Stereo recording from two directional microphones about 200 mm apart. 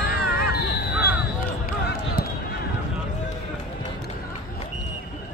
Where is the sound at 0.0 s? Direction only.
50° left (ahead or behind).